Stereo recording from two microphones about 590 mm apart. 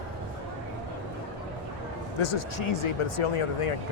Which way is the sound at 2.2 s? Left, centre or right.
Left.